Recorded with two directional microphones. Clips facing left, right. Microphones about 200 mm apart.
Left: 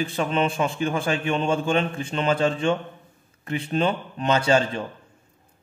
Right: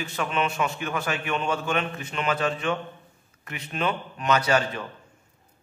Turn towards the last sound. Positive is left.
turn(degrees=25)  # may be behind; listen again after turning